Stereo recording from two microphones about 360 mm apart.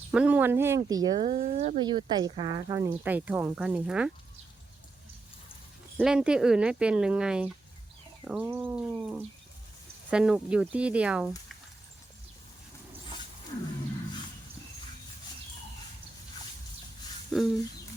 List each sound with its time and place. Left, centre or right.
0.1 s speech: centre
6.0 s speech: centre
17.3 s bird: centre